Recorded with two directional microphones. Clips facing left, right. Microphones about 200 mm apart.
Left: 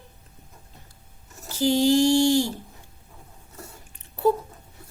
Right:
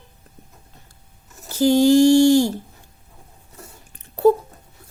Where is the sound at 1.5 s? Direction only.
45° right (ahead or behind).